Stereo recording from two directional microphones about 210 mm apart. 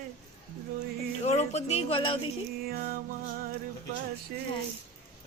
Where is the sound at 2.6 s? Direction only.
45° right (ahead or behind).